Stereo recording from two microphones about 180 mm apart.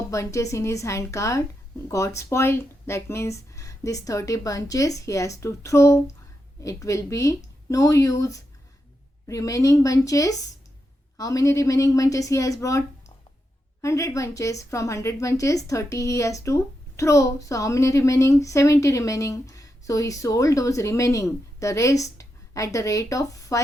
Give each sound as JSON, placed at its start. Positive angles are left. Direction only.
{"t": 0.1, "sound": "a woman's voice", "side_deg": 15}
{"t": 13.8, "sound": "a woman's voice", "side_deg": 15}